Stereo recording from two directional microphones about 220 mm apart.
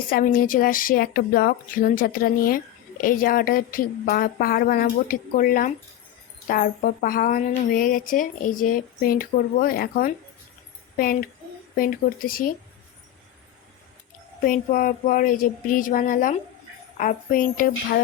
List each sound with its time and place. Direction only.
0.1 s speech: 40° left (ahead or behind)
14.4 s speech: 40° left (ahead or behind)